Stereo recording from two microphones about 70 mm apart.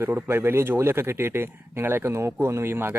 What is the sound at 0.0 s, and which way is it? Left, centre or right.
Speech, right.